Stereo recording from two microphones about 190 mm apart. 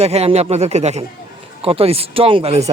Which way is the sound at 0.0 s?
35° right (ahead or behind).